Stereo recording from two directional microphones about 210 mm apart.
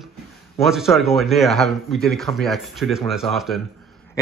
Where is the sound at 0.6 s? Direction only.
Centre (ahead or behind).